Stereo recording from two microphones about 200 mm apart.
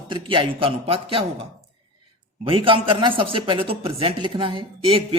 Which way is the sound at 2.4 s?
25° right (ahead or behind).